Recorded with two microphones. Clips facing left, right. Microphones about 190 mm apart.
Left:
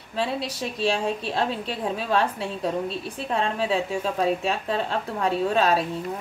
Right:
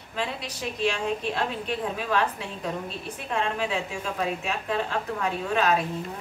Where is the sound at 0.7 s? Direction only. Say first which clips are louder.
Left 2 dB; 35° left (ahead or behind).